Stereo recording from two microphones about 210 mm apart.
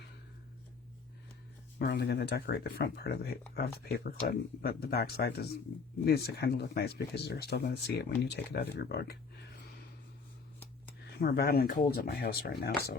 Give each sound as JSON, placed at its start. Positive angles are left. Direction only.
{"t": 1.8, "sound": "speech", "side_deg": 55}
{"t": 11.1, "sound": "speech", "side_deg": 50}